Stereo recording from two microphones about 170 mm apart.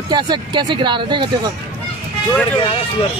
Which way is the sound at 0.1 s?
25° right (ahead or behind).